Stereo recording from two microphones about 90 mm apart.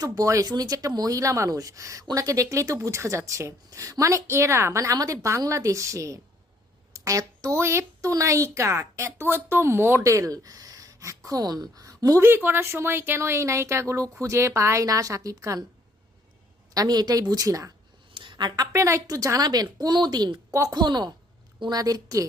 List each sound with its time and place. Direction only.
0.0 s a woman's voice: 40° right (ahead or behind)
6.9 s a sound: 35° right (ahead or behind)
7.6 s a woman's voice: 30° right (ahead or behind)
12.2 s a woman's voice: 25° right (ahead or behind)
16.7 s speech: 45° right (ahead or behind)
18.1 s a sound: 65° right (ahead or behind)
18.7 s speech: 35° right (ahead or behind); by 20.4 s 50° right (ahead or behind)
20.5 s a woman's voice: 35° right (ahead or behind)
20.8 s speech: 55° right (ahead or behind)